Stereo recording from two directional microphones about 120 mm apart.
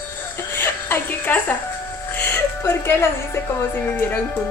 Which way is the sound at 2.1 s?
15° left (ahead or behind).